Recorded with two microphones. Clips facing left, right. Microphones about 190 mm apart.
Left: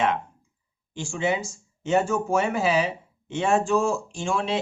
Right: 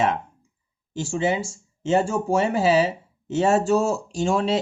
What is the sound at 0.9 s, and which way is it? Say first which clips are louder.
Speech: right 3 dB; 35° right (ahead or behind).